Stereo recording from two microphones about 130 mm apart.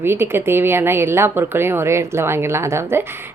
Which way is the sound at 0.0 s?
20° right (ahead or behind).